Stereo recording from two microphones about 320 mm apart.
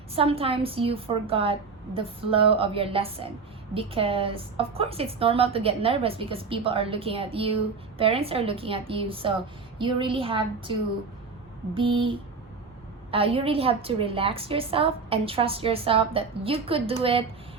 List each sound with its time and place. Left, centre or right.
0.2 s a woman's voice: centre